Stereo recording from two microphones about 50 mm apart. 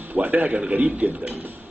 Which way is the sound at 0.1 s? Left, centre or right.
Right.